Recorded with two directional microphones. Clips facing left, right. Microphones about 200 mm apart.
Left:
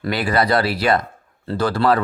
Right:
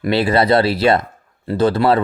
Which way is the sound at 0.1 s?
25° right (ahead or behind).